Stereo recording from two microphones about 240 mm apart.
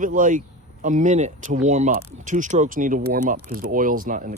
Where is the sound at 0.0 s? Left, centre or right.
Right.